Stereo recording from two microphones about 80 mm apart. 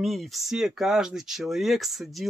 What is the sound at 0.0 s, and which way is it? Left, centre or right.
Speech, centre.